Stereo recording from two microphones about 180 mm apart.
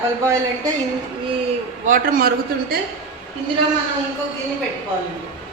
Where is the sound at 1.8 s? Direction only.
50° right (ahead or behind).